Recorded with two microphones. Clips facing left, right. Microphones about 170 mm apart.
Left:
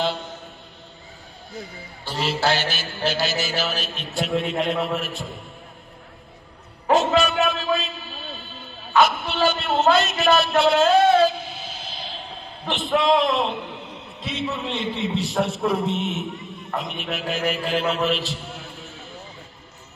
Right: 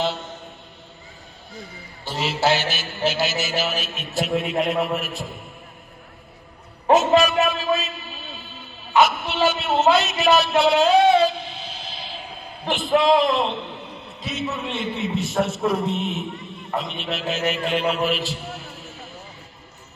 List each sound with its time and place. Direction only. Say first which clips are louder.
2.0 s a man's voice: right 1 dB; centre (ahead or behind)
7.2 s a man's voice: right 1 dB; centre (ahead or behind)
14.8 s a man's voice: even; 35° left (ahead or behind)
15.3 s a man's voice: right 2 dB; centre (ahead or behind)